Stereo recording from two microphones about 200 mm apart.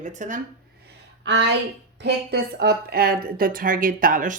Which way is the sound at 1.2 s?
65° right (ahead or behind).